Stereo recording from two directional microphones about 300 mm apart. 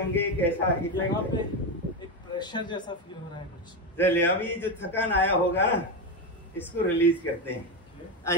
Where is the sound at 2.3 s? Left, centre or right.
Centre.